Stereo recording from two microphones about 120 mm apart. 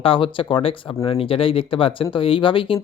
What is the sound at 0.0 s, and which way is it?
Speech, 45° left (ahead or behind).